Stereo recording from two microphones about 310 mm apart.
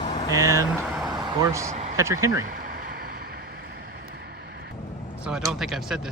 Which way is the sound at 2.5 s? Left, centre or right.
Right.